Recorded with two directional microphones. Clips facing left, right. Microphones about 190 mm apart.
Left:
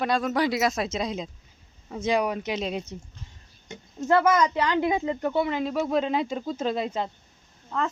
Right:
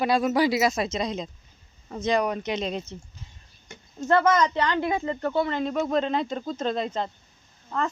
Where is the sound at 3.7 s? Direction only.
20° left (ahead or behind).